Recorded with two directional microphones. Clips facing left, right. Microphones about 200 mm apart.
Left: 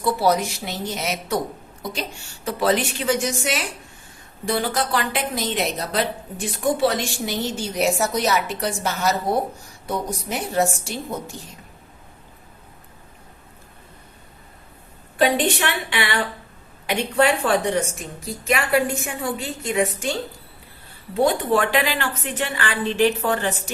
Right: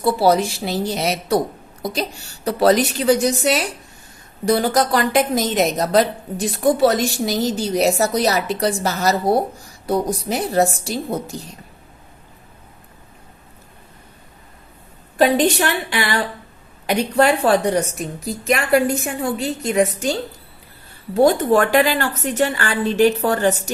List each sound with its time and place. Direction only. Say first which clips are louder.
0.0 s a woman's voice: right 4 dB; 30° right (ahead or behind)
15.2 s a woman's voice: right 4 dB; 40° right (ahead or behind)